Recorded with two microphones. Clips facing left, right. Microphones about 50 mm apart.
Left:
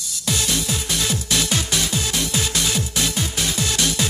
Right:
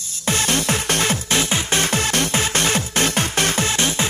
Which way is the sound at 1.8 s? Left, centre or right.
Right.